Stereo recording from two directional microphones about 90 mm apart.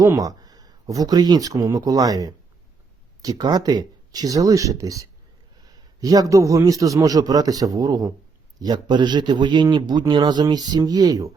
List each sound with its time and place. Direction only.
0.2 s a man's voice: 45° right (ahead or behind)